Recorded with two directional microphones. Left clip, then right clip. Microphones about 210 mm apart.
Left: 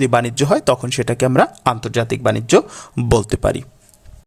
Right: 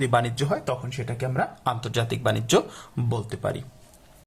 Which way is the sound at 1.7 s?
30° left (ahead or behind).